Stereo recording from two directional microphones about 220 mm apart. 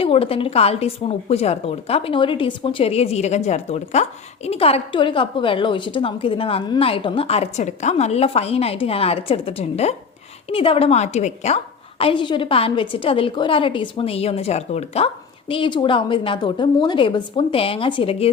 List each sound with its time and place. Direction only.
0.0 s a woman's voice: 25° left (ahead or behind)